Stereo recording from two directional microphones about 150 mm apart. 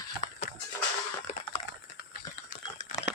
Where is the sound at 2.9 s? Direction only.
35° left (ahead or behind).